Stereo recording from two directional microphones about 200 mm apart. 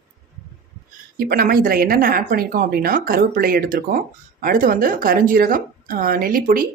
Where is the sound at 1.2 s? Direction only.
50° right (ahead or behind).